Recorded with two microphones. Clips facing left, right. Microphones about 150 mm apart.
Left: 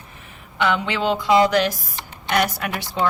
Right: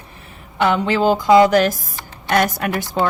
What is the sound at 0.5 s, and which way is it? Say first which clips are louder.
A woman's voice: right 5 dB; 40° right (ahead or behind).